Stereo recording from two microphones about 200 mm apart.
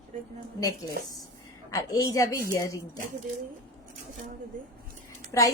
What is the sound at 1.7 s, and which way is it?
Speech, 15° left (ahead or behind).